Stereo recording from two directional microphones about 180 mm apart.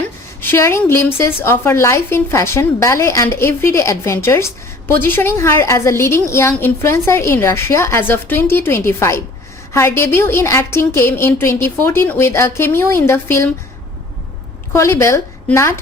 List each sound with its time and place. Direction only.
0.4 s a woman's voice: 15° left (ahead or behind)
14.7 s speech: 15° left (ahead or behind)